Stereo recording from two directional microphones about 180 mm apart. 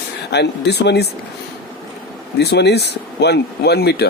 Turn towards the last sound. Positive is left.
turn(degrees=65)  # may be behind; listen again after turning